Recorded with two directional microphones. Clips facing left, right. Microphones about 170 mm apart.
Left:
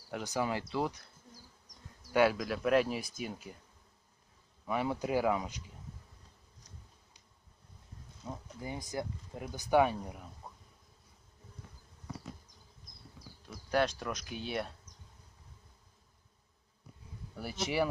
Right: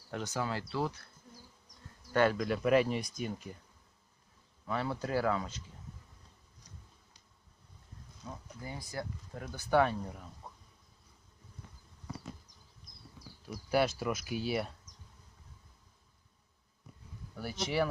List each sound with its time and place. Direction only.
0.1 s speech: 10° left (ahead or behind)
2.1 s speech: 5° left (ahead or behind)
4.6 s speech: 15° left (ahead or behind)
8.2 s speech: 20° left (ahead or behind)
10.4 s bee: centre (ahead or behind)
13.5 s speech: 5° right (ahead or behind)
17.3 s speech: 10° left (ahead or behind)